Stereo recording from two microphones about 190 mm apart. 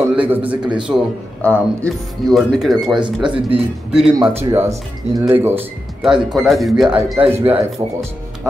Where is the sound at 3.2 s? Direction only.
25° right (ahead or behind).